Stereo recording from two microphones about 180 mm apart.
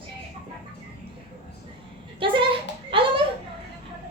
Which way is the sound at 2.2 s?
30° right (ahead or behind).